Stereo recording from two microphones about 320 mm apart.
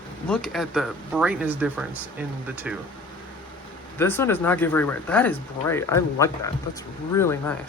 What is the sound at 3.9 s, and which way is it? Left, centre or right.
Speech, centre.